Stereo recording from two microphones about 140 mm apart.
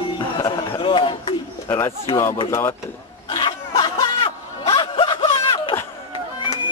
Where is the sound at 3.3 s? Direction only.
30° left (ahead or behind).